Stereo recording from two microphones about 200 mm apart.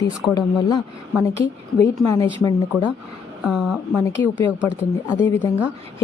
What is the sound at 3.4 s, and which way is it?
Speech, 5° right (ahead or behind).